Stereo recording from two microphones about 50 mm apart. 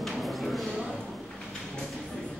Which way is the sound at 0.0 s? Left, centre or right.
Centre.